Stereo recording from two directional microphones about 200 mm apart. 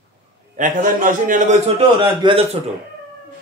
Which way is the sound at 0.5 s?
40° right (ahead or behind).